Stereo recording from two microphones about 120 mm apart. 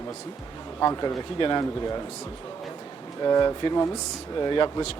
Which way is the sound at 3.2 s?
35° left (ahead or behind).